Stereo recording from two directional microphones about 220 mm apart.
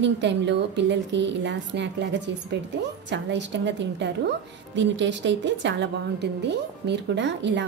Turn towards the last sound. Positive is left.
turn(degrees=-55)  # may be behind; listen again after turning